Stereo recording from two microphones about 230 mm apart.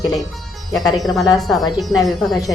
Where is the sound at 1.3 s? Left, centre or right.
Centre.